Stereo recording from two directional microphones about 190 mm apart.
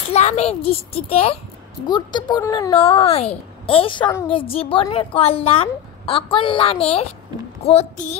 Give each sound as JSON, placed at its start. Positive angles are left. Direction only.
{"t": 0.1, "sound": "a child's voice", "side_deg": 35}